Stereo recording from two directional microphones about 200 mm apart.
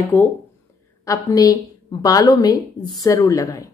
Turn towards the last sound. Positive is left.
turn(degrees=15)  # may be behind; listen again after turning